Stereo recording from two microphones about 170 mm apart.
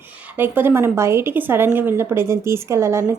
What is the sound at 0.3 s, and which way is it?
Speech, 10° right (ahead or behind).